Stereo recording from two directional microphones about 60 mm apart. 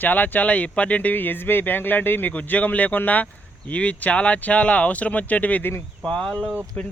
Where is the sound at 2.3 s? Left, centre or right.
Left.